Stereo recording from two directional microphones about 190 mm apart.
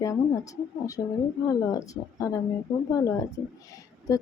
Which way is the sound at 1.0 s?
15° left (ahead or behind).